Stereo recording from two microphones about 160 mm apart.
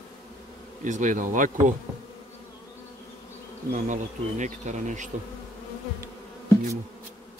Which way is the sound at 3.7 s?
50° right (ahead or behind).